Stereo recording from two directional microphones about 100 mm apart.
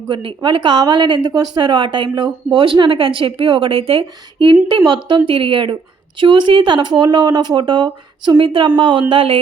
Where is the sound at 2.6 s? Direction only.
60° right (ahead or behind).